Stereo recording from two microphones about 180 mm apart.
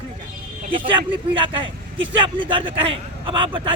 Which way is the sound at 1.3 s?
30° right (ahead or behind).